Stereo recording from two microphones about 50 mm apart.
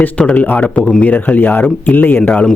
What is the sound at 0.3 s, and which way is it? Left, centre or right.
Speech, left.